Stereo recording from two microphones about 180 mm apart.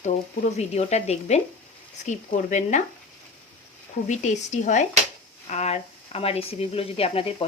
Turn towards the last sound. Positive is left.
turn(degrees=30)  # may be behind; listen again after turning